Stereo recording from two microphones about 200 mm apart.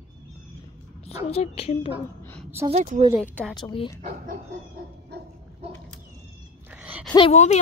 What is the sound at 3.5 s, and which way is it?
Speech, 20° left (ahead or behind).